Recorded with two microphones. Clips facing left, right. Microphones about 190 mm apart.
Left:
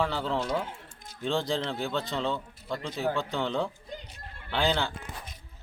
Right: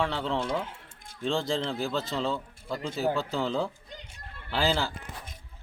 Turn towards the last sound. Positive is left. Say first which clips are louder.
# even
turn(degrees=0)  # may be behind; listen again after turning